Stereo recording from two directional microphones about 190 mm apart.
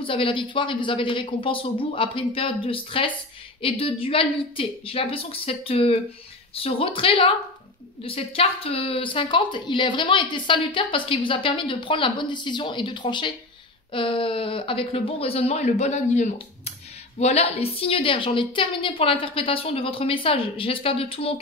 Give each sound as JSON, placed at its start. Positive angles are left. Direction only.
{"t": 0.0, "sound": "a woman's voice", "side_deg": 25}